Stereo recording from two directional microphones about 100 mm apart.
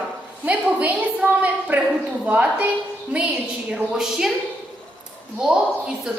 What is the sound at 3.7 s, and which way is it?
Speech, 5° right (ahead or behind).